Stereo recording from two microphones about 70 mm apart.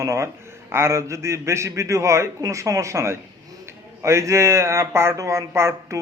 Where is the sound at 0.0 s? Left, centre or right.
Right.